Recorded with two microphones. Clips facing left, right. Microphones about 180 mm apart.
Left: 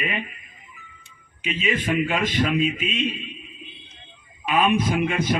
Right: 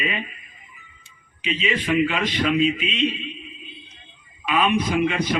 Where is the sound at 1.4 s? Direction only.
50° left (ahead or behind).